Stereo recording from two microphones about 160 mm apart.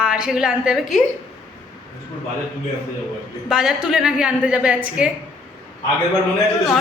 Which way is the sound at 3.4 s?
5° right (ahead or behind).